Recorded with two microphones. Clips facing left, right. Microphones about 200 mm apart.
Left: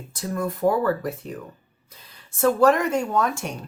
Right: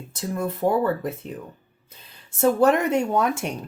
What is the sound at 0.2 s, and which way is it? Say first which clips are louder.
Speech: even; 25° right (ahead or behind).